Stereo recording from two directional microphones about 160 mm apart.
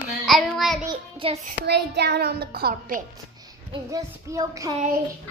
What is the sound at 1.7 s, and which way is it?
A child's voice, 90° right.